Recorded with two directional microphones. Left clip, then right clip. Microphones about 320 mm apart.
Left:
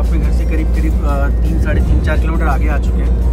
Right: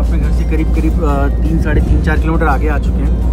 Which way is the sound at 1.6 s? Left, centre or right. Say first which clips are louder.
Right 1 dB; centre.